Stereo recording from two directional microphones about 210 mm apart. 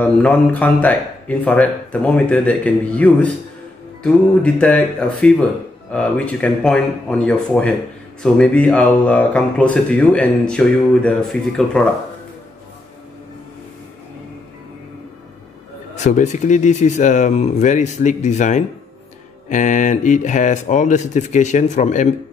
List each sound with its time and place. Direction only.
0.0 s speech: 5° left (ahead or behind)
16.0 s speech: 35° left (ahead or behind)